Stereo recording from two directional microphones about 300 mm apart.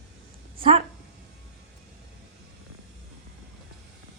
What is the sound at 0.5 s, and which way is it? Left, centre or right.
Dog, centre.